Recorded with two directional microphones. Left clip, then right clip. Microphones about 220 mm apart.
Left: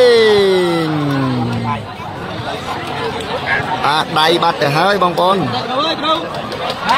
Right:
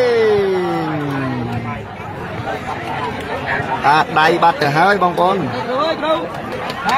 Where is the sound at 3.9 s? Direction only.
10° left (ahead or behind).